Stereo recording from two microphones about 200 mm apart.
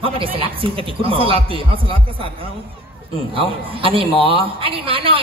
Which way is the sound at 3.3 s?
25° right (ahead or behind).